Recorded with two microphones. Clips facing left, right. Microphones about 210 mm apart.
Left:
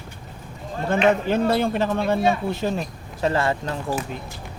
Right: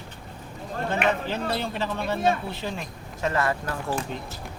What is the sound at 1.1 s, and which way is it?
Speech, 50° left (ahead or behind).